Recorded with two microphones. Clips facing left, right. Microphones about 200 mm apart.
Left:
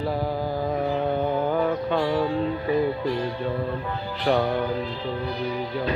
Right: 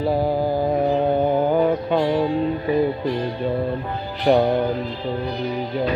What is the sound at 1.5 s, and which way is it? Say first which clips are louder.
Music: right 4 dB; 15° right (ahead or behind).